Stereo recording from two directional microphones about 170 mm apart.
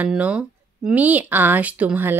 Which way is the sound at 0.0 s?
5° right (ahead or behind).